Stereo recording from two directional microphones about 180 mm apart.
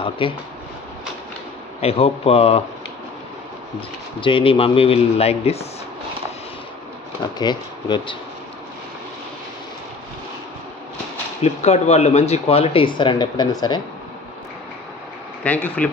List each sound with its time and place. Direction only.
0.2 s speech: 30° left (ahead or behind)
1.8 s speech: 35° left (ahead or behind)
4.2 s speech: 30° left (ahead or behind)
7.3 s speech: 25° left (ahead or behind)
11.4 s speech: 35° left (ahead or behind)
15.4 s speech: 10° left (ahead or behind)